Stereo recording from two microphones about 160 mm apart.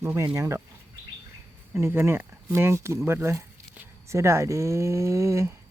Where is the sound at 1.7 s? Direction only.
15° right (ahead or behind).